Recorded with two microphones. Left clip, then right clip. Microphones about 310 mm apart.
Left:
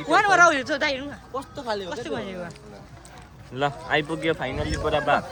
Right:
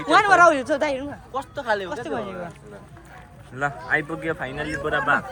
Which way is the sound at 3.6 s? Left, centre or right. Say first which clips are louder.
Even; centre.